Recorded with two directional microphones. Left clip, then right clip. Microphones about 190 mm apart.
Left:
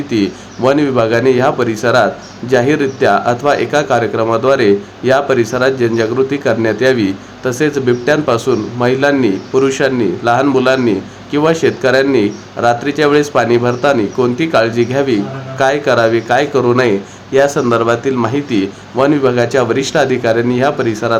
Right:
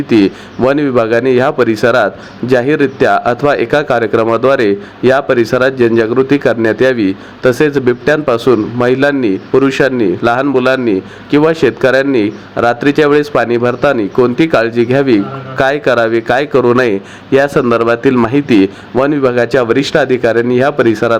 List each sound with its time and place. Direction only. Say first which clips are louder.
0.1 s a man's voice: right 7 dB; 25° right (ahead or behind)